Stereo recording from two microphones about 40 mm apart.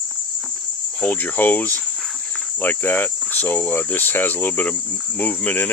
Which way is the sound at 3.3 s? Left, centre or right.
Left.